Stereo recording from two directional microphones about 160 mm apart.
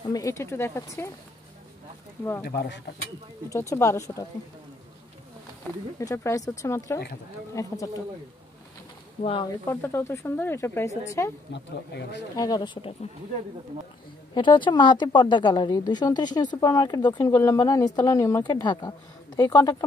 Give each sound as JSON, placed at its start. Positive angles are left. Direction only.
{"t": 0.1, "sound": "speech", "side_deg": 20}
{"t": 2.4, "sound": "speech", "side_deg": 90}
{"t": 3.4, "sound": "speech", "side_deg": 20}
{"t": 5.9, "sound": "speech", "side_deg": 20}
{"t": 9.2, "sound": "speech", "side_deg": 35}
{"t": 9.7, "sound": "speech", "side_deg": 15}
{"t": 11.5, "sound": "speech", "side_deg": 90}
{"t": 12.4, "sound": "speech", "side_deg": 25}
{"t": 14.3, "sound": "speech", "side_deg": 30}